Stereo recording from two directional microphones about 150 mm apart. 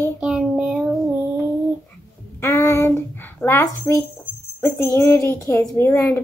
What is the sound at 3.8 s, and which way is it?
A child's voice, 20° left (ahead or behind).